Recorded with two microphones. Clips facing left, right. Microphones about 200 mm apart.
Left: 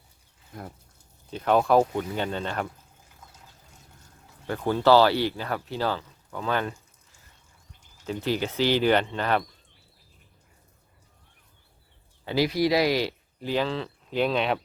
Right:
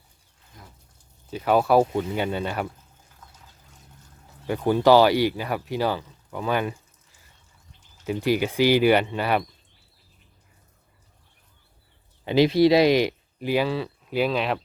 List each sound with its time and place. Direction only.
0.5 s speech: 55° left (ahead or behind)
1.3 s speech: 5° right (ahead or behind)
4.4 s speech: 10° right (ahead or behind)
8.0 s speech: 10° right (ahead or behind)
12.2 s speech: 20° right (ahead or behind); by 14.6 s centre (ahead or behind)